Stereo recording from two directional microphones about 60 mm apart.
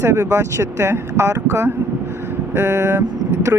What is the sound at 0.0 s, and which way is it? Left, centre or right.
Speech, right.